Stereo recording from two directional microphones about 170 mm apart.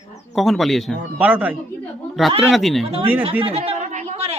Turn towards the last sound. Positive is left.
turn(degrees=-40)  # may be behind; listen again after turning